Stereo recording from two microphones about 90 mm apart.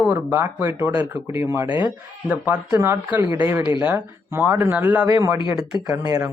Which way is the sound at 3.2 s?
40° right (ahead or behind).